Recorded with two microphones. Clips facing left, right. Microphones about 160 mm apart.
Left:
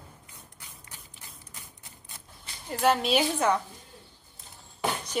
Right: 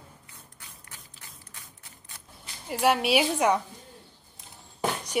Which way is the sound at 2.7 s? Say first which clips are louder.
Right 1 dB; 10° right (ahead or behind).